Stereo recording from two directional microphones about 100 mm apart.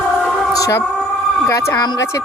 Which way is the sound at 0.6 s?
30° left (ahead or behind).